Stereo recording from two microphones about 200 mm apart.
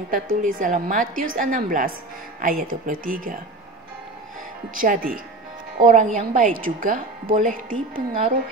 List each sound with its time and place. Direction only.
0.4 s a woman's voice: 40° right (ahead or behind)
4.7 s a woman's voice: 45° right (ahead or behind)